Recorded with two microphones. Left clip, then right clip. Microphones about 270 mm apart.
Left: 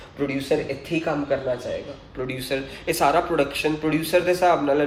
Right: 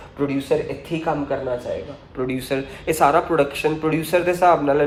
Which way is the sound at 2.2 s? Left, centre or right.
Centre.